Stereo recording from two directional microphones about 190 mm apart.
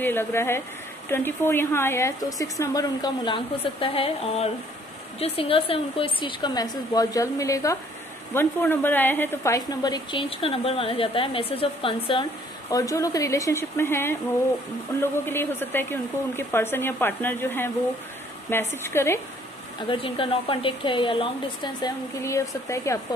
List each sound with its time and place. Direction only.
0.0 s a woman's voice: 10° left (ahead or behind); by 12.3 s 30° left (ahead or behind)
12.7 s speech: 15° left (ahead or behind)
19.9 s a woman's voice: 30° left (ahead or behind)